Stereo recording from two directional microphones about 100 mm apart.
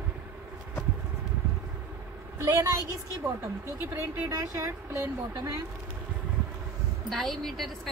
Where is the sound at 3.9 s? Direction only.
35° right (ahead or behind).